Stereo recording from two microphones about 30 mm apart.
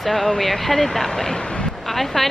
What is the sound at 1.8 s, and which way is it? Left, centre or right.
Speech, centre.